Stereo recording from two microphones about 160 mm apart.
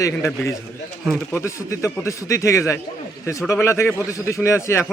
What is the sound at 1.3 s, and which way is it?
Speech, 15° left (ahead or behind).